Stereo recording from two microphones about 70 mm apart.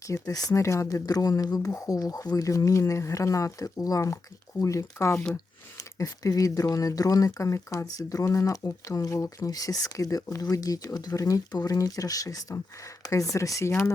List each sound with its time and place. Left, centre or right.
0.0 s speech: left
5.7 s speech: left
9.5 s speech: left
11.1 s speech: left